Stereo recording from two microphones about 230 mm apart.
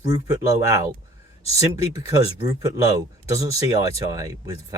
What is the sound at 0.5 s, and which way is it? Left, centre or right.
Speech, centre.